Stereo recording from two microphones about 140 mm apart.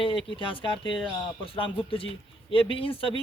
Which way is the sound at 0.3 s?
40° left (ahead or behind).